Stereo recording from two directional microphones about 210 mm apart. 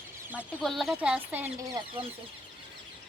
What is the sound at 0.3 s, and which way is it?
Speech, 5° right (ahead or behind).